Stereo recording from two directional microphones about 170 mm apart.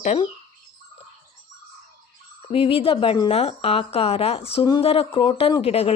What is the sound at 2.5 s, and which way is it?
A woman's voice, 35° left (ahead or behind).